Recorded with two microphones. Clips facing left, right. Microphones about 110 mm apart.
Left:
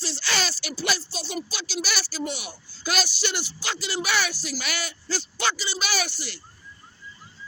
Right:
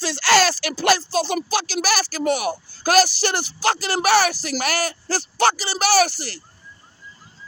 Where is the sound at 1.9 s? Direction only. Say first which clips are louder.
Right 12 dB; 50° right (ahead or behind).